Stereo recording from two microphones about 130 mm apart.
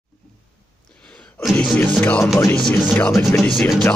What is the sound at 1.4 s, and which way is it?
Music, centre (ahead or behind).